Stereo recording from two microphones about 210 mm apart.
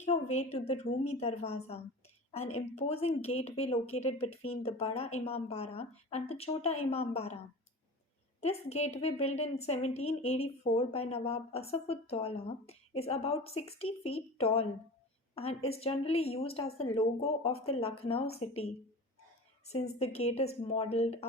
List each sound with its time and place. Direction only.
0.0 s a sound: 30° left (ahead or behind)
1.1 s a woman's voice: 30° left (ahead or behind)
8.4 s a woman's voice: 30° left (ahead or behind)
19.6 s a woman's voice: 30° left (ahead or behind)